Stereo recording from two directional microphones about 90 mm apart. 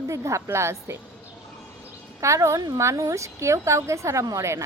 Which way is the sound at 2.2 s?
35° right (ahead or behind).